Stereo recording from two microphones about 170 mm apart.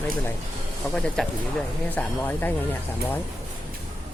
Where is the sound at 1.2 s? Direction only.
5° left (ahead or behind).